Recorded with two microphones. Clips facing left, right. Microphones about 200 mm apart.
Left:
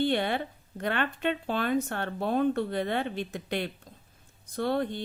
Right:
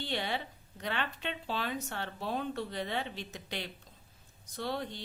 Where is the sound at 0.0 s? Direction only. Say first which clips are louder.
Left 9 dB; 55° left (ahead or behind).